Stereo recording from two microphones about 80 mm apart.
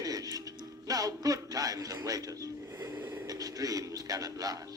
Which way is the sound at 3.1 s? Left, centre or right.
Right.